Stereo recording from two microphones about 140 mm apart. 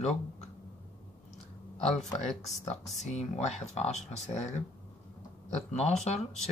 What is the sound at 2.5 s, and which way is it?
Speech, 55° left (ahead or behind).